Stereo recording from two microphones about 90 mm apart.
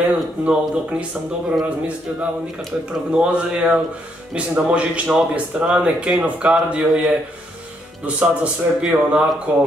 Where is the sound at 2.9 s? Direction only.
10° right (ahead or behind).